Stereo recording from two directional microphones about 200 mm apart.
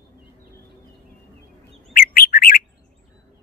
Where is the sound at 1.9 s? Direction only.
45° left (ahead or behind).